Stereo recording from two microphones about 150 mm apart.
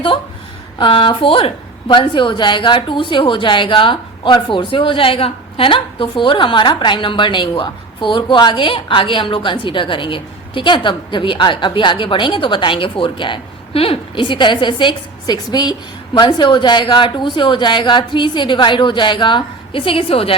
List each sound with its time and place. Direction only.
0.8 s a woman's voice: 35° left (ahead or behind)